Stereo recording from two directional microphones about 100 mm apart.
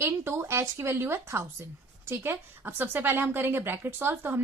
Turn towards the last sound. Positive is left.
turn(degrees=-20)  # may be behind; listen again after turning